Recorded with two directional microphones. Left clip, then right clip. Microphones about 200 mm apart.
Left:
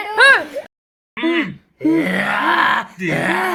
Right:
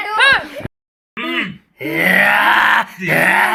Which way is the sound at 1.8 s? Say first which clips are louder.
Right 5 dB; 5° right (ahead or behind).